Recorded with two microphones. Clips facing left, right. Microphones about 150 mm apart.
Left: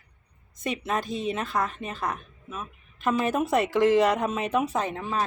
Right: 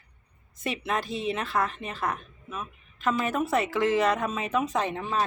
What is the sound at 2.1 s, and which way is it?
Speech, 5° left (ahead or behind).